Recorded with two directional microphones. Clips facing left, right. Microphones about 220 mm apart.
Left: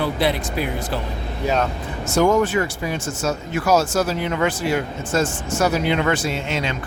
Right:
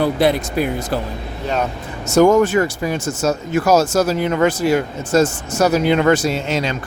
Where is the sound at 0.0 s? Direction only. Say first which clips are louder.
Right 5 dB; 45° right (ahead or behind).